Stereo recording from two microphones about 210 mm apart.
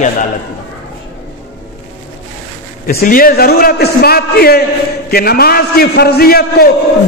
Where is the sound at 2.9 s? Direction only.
45° left (ahead or behind).